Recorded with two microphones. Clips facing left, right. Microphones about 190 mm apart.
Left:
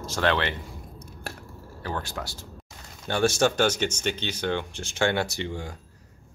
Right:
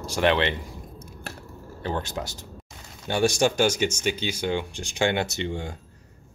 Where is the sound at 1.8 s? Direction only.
20° right (ahead or behind).